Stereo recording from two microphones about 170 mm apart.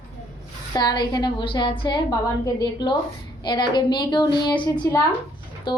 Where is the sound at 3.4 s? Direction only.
25° left (ahead or behind).